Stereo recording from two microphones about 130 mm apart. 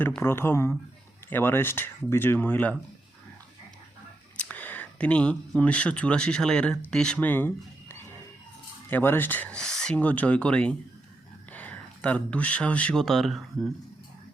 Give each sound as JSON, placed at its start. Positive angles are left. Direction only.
{"t": 0.2, "sound": "speech", "side_deg": 15}
{"t": 4.4, "sound": "speech", "side_deg": 10}